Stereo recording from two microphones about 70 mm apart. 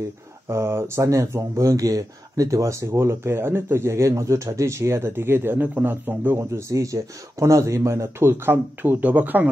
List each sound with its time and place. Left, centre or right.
0.5 s speech: right
6.3 s speech: right